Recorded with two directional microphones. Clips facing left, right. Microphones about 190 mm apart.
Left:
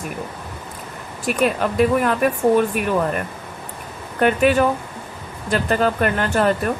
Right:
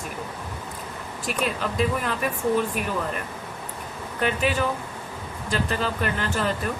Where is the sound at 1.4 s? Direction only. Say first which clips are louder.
Left 8 dB; 60° left (ahead or behind).